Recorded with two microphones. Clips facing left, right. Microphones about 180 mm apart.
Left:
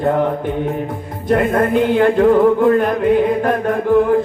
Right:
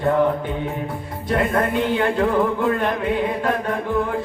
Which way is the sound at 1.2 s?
50° left (ahead or behind).